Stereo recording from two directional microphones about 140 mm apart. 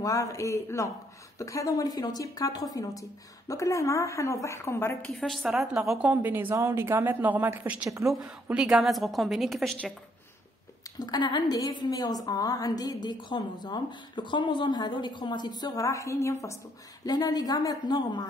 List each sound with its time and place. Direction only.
0.0 s a woman's voice: 25° left (ahead or behind)
5.1 s a woman's voice: centre (ahead or behind)
11.0 s a woman's voice: 30° left (ahead or behind)